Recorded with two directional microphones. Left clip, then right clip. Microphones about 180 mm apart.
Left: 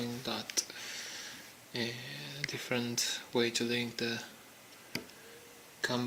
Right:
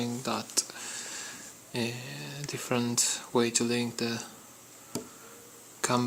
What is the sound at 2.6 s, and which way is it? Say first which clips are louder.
Speech: right 6 dB; 10° right (ahead or behind).